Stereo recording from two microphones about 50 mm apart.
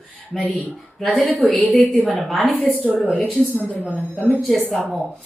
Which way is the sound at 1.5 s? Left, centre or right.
Left.